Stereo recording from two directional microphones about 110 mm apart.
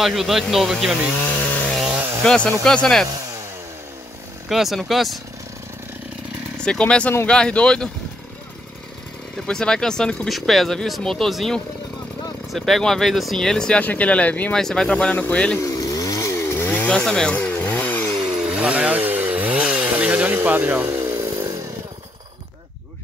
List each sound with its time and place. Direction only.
0.0 s speech: centre (ahead or behind)
1.2 s chainsaw: 10° left (ahead or behind)
2.2 s speech: 10° left (ahead or behind)
4.5 s speech: centre (ahead or behind)
6.6 s speech: 10° left (ahead or behind)
9.5 s speech: 5° left (ahead or behind)
15.6 s chainsaw: 30° left (ahead or behind); by 18.1 s 15° left (ahead or behind)
18.3 s chainsaw: 10° right (ahead or behind)
20.3 s speech: 20° right (ahead or behind)
21.3 s chainsaw: 40° right (ahead or behind)